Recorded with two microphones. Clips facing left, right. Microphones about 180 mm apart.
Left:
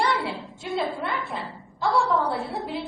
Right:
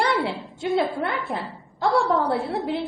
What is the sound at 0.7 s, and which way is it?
Speech, 55° right (ahead or behind).